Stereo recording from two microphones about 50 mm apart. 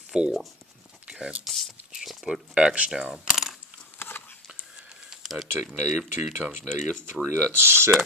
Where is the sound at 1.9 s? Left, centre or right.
Centre.